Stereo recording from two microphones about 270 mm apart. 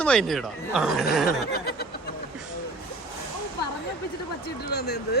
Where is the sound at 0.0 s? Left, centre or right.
Centre.